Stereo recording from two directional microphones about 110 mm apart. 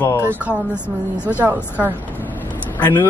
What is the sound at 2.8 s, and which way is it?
Speech, 20° left (ahead or behind).